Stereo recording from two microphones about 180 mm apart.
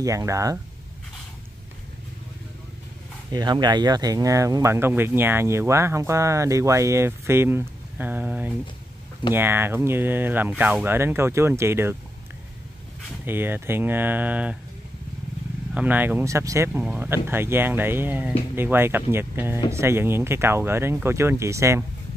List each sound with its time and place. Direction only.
0.0 s speech: 15° right (ahead or behind)
3.3 s speech: 20° right (ahead or behind)
13.2 s speech: 10° right (ahead or behind)
15.7 s speech: 10° right (ahead or behind)